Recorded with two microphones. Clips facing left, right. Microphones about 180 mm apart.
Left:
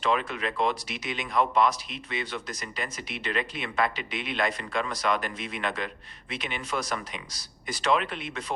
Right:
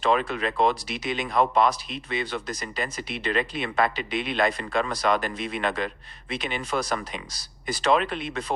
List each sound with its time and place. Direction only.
0.0 s speech: 35° right (ahead or behind)